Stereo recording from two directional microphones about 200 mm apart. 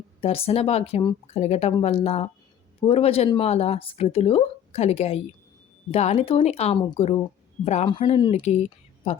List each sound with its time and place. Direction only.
0.2 s speech: 30° left (ahead or behind)